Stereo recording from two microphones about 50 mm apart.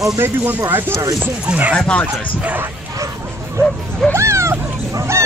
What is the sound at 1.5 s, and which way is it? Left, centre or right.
Speech, right.